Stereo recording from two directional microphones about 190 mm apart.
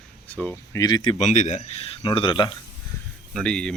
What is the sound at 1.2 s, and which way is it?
Speech, 40° left (ahead or behind).